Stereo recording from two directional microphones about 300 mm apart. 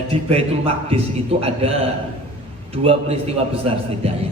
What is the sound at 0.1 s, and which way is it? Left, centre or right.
A man's voice, centre.